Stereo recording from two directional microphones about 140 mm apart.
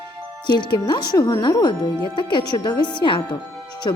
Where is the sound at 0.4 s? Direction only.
35° left (ahead or behind).